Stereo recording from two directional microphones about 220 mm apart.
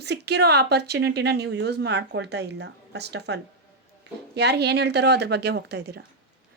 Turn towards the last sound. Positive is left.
turn(degrees=-50)  # may be behind; listen again after turning